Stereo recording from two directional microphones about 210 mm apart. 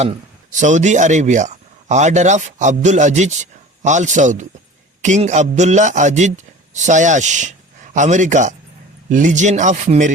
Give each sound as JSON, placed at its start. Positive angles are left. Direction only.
{"t": 0.0, "sound": "a man's voice", "side_deg": -35}